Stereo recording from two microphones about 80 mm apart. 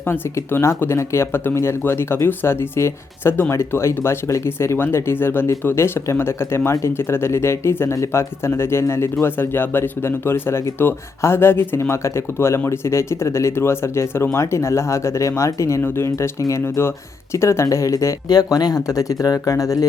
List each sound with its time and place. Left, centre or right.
0.0 s speech: left
15.8 s speech: left